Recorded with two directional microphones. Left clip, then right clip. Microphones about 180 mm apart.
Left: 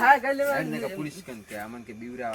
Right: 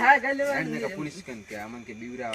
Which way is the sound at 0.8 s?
25° left (ahead or behind).